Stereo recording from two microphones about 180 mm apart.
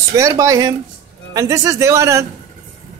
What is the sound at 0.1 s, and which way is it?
Speech, 15° right (ahead or behind).